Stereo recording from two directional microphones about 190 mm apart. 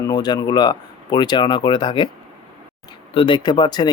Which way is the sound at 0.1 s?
20° left (ahead or behind).